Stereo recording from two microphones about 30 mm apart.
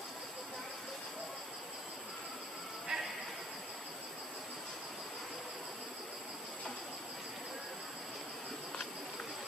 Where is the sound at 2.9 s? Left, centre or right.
Centre.